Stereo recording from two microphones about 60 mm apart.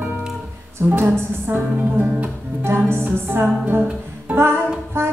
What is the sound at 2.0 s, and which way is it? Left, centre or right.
Music, centre.